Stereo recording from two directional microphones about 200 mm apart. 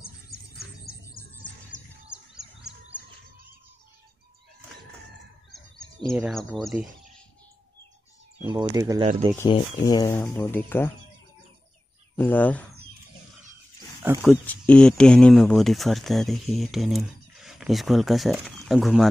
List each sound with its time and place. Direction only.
0.0 s bird: 50° left (ahead or behind)
2.3 s bird: 5° right (ahead or behind)
5.5 s fowl: centre (ahead or behind)
6.1 s speech: centre (ahead or behind)
8.5 s speech: 20° right (ahead or behind)
9.5 s speech: 20° left (ahead or behind)
12.2 s speech: 10° left (ahead or behind)
14.2 s speech: 5° left (ahead or behind)